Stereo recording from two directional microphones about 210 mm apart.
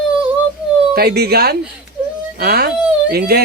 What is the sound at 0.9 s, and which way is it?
Speech, 50° right (ahead or behind).